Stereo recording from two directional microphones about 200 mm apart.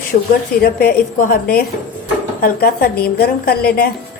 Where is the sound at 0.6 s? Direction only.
50° left (ahead or behind).